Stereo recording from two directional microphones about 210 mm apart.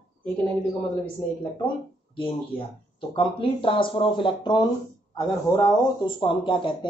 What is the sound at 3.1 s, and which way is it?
Speech, 25° left (ahead or behind).